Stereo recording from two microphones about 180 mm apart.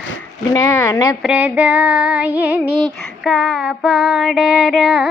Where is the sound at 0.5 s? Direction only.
15° left (ahead or behind).